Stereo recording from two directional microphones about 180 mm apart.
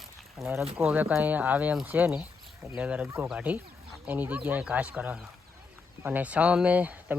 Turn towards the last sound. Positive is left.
turn(degrees=-10)  # may be behind; listen again after turning